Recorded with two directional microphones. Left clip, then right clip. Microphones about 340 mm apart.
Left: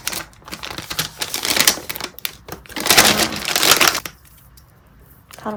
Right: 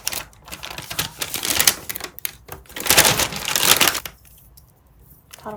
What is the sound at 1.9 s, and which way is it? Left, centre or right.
Typewriter, centre.